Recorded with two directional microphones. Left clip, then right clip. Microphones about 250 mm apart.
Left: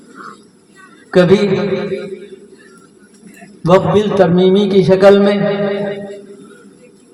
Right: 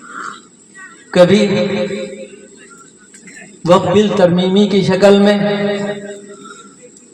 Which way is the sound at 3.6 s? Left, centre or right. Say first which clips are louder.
Even; left.